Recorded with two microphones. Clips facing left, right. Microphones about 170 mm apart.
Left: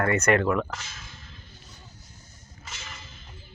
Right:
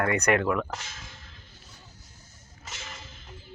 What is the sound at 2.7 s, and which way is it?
Whip, 40° right (ahead or behind).